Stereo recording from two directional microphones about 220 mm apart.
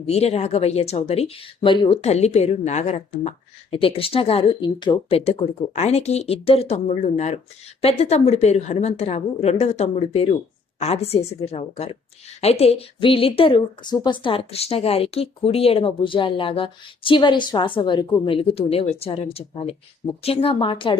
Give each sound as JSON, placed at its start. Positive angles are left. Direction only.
{"t": 0.0, "sound": "speech", "side_deg": 30}